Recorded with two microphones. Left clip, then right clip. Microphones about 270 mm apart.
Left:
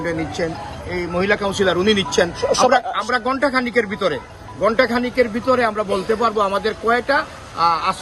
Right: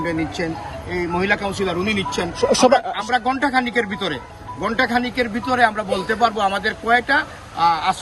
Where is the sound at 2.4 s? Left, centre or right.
Right.